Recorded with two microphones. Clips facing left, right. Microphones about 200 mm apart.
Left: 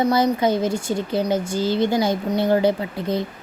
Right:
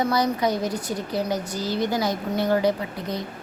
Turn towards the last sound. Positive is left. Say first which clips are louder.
# left 5 dB
turn(degrees=25)  # may be behind; listen again after turning